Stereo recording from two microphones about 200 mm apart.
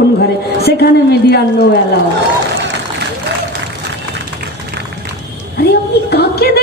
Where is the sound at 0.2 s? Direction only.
50° left (ahead or behind).